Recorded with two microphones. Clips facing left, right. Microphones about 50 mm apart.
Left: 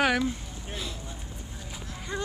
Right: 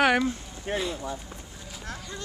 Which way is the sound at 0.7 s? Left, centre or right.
Right.